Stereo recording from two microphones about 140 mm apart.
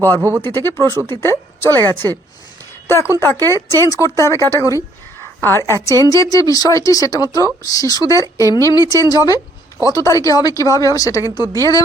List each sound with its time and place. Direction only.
0.2 s speech: 20° right (ahead or behind)
0.4 s a woman's voice: 15° left (ahead or behind)